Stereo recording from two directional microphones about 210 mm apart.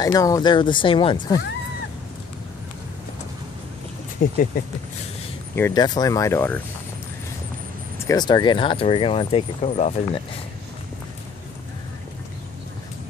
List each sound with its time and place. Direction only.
0.0 s speech: 15° left (ahead or behind)
4.2 s speech: 40° left (ahead or behind)
5.6 s speech: 20° left (ahead or behind)
8.0 s speech: 15° left (ahead or behind)